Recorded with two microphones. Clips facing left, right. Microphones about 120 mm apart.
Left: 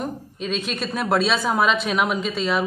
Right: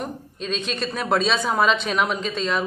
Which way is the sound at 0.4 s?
5° left (ahead or behind).